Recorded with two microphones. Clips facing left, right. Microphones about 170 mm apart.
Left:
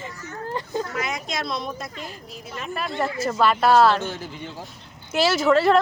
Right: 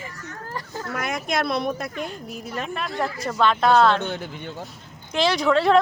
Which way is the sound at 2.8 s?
Centre (ahead or behind).